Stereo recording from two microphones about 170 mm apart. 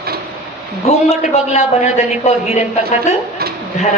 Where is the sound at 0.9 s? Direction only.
40° left (ahead or behind).